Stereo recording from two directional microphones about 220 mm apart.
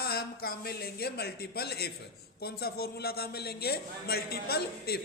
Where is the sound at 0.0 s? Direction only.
45° left (ahead or behind).